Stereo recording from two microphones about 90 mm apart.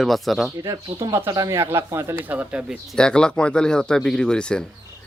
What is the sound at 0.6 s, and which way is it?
Speech, 35° right (ahead or behind).